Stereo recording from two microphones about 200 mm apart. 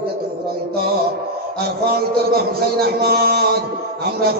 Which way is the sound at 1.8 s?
50° right (ahead or behind).